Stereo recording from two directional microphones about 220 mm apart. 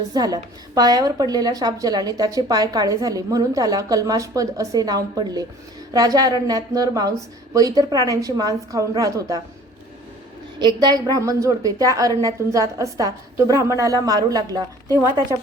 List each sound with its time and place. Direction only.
0.1 s a woman's voice: 15° right (ahead or behind)
10.6 s a woman's voice: 20° right (ahead or behind)